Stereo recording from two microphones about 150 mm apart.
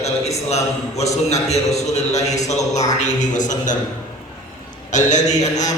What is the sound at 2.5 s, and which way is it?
A man's voice, 50° left (ahead or behind).